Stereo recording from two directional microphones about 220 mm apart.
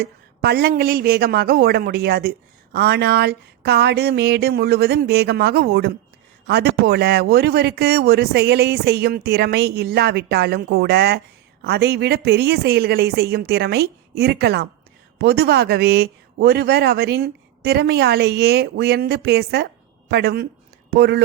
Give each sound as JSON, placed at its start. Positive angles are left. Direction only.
{"t": 0.0, "sound": "speech", "side_deg": -45}